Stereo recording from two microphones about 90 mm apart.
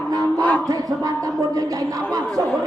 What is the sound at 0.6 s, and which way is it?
Speech, 40° right (ahead or behind).